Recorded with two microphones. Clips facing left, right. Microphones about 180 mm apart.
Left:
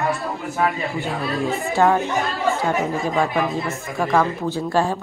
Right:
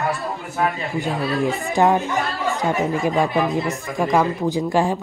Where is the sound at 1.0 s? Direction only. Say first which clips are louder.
Right 4 dB; 20° right (ahead or behind).